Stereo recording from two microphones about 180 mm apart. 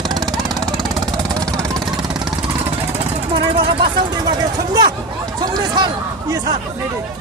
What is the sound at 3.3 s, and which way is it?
Speech, 30° right (ahead or behind).